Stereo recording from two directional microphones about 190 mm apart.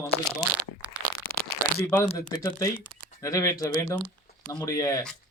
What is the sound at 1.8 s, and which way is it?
A man's voice, 15° left (ahead or behind).